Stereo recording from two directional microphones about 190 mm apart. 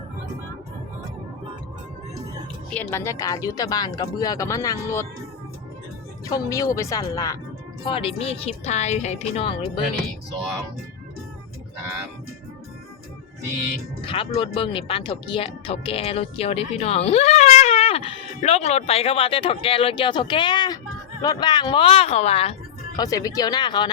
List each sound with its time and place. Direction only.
2.6 s speech: 10° left (ahead or behind)
6.2 s speech: 15° left (ahead or behind)
7.9 s speech: 30° left (ahead or behind)
14.0 s speech: 30° left (ahead or behind)
23.0 s speech: 20° left (ahead or behind)